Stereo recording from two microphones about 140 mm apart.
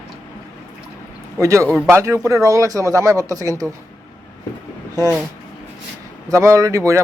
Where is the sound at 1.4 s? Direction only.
20° right (ahead or behind).